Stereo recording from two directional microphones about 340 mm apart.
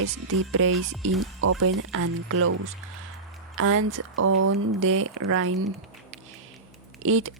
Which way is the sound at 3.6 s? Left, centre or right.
Right.